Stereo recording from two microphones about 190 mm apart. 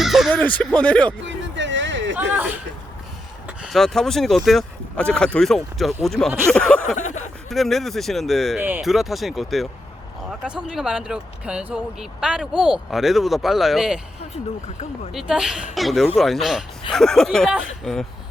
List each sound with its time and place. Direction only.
0.0 s a sound: centre (ahead or behind)
0.3 s speech: 10° left (ahead or behind)
1.2 s a sound: 75° right (ahead or behind)
3.4 s speech: 5° right (ahead or behind)
6.9 s speech: 40° left (ahead or behind)
7.5 s speech: centre (ahead or behind)
15.1 s speech: 5° right (ahead or behind)